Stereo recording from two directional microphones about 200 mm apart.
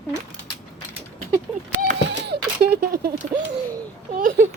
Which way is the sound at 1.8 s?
50° right (ahead or behind).